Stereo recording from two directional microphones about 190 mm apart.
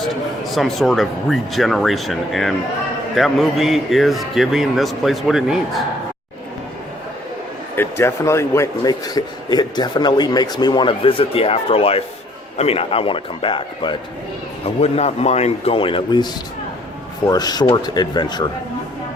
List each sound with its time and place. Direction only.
0.5 s a man's voice: centre (ahead or behind)
7.8 s a man's voice: 15° left (ahead or behind)